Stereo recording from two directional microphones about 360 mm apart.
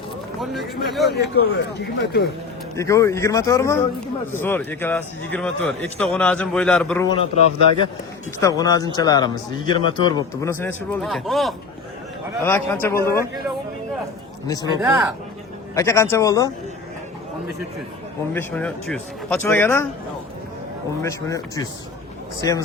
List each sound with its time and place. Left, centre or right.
0.3 s speech: centre
1.1 s speech: left
2.7 s a man's voice: centre
8.4 s a man's voice: centre
14.4 s a man's voice: centre
14.8 s a man's voice: centre
18.3 s a man's voice: centre
21.0 s a man's voice: centre